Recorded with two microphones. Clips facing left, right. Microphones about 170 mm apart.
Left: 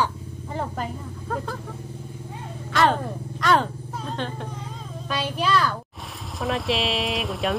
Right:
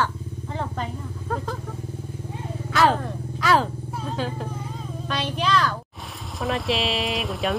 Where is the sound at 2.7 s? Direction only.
Centre (ahead or behind).